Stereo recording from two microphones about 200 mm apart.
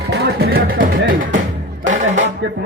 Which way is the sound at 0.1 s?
50° right (ahead or behind).